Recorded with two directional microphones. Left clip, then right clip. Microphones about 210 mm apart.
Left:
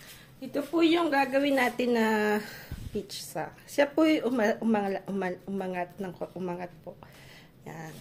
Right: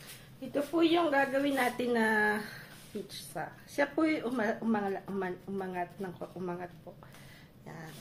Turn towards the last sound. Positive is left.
turn(degrees=35)  # may be behind; listen again after turning